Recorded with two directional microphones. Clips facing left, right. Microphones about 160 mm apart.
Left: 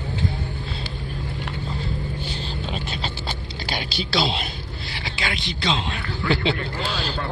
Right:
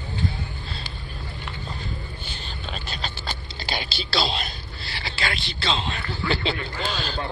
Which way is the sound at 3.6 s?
10° left (ahead or behind).